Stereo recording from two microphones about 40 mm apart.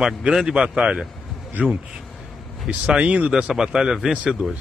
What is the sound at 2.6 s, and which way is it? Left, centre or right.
Speech, right.